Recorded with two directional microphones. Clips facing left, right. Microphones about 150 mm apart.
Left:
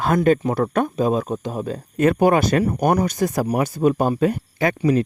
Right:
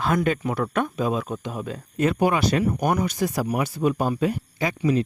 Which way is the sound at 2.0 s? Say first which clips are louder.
Left 5 dB; 50° left (ahead or behind).